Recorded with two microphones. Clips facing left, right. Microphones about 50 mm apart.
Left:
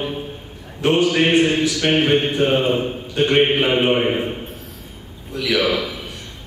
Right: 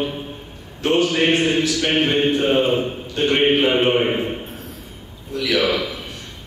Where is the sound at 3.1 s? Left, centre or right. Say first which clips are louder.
Left 1 dB; centre.